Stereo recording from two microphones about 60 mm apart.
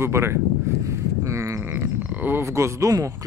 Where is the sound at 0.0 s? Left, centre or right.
Right.